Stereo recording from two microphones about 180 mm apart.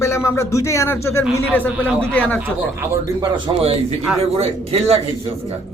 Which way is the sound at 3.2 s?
30° right (ahead or behind).